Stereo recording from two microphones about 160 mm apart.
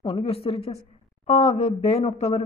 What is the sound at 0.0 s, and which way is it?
Speech, 35° left (ahead or behind).